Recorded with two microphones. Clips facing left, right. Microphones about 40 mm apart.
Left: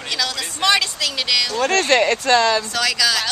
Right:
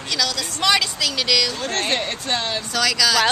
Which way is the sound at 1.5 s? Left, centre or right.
Left.